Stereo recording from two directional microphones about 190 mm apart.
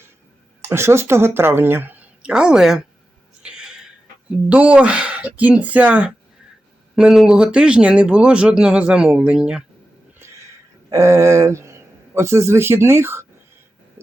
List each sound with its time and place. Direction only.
0.7 s a woman's voice: 15° right (ahead or behind)
3.4 s a sound: 5° right (ahead or behind)
4.4 s a woman's voice: 5° right (ahead or behind)
10.8 s a man's voice: 15° right (ahead or behind)